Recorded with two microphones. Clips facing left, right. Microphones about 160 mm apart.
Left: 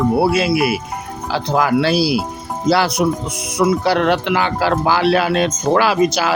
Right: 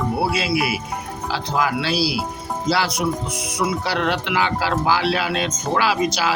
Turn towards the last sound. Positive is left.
turn(degrees=50)  # may be behind; listen again after turning